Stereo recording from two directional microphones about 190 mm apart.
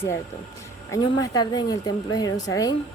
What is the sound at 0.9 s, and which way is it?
Speech, 20° left (ahead or behind).